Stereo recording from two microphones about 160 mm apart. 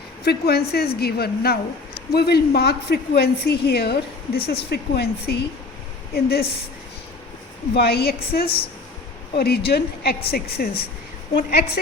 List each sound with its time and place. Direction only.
0.3 s a woman's voice: 80° left
6.1 s a woman's voice: 75° left (ahead or behind)
7.8 s a woman's voice: 80° left